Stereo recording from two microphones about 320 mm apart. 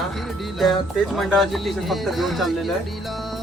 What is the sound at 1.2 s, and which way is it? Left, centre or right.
Music, centre.